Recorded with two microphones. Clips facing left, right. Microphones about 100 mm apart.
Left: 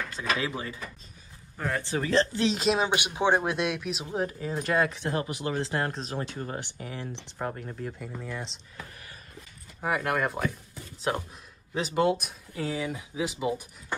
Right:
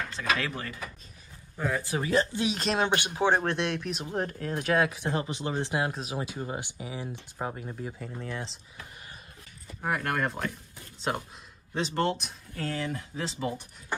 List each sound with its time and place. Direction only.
0.4 s speech: 20° left (ahead or behind)
1.6 s speech: 5° right (ahead or behind)
2.0 s speech: 15° right (ahead or behind)
2.5 s speech: 5° left (ahead or behind)
3.0 s speech: 15° left (ahead or behind)
3.5 s speech: 5° left (ahead or behind)
5.0 s speech: 25° right (ahead or behind)
5.8 s speech: 5° right (ahead or behind)
9.8 s speech: 5° left (ahead or behind)
11.7 s speech: 5° left (ahead or behind)